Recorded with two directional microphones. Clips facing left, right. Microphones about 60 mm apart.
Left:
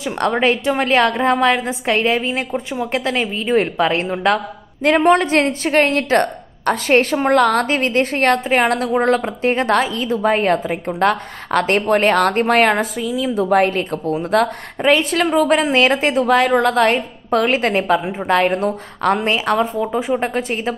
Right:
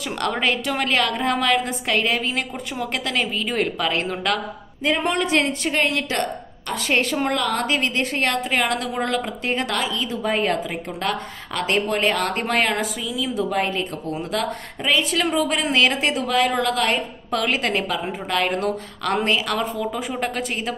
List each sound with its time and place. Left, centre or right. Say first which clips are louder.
0.0 s a woman's voice: left 6 dB; left
4.8 s a woman's voice: left 8 dB; left
5.1 s a woman's voice: left 6 dB; left
7.6 s a woman's voice: left 5 dB; left
13.5 s a woman's voice: left 8 dB; left